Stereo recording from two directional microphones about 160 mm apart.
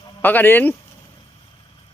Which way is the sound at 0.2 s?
10° left (ahead or behind).